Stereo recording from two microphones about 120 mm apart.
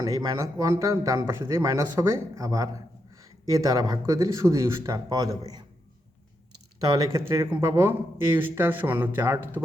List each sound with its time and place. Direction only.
0.0 s a man's voice: 25° right (ahead or behind)
6.8 s a man's voice: 30° right (ahead or behind)